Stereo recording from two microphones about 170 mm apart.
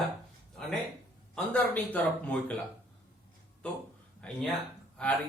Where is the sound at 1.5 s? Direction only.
10° left (ahead or behind).